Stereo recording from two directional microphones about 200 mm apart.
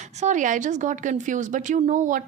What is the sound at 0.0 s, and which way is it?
Speech, 35° right (ahead or behind).